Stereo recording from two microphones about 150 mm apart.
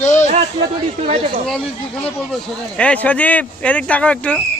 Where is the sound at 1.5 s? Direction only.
5° left (ahead or behind).